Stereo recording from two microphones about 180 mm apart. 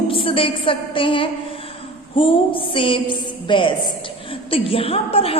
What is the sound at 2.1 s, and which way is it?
A woman's voice, 30° left (ahead or behind).